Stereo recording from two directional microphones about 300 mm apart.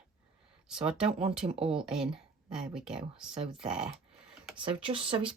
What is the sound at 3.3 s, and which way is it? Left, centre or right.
Speech, centre.